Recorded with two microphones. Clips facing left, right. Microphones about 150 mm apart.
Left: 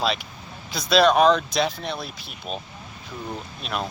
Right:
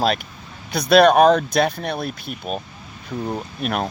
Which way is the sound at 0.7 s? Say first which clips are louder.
Right 5 dB; 60° right (ahead or behind).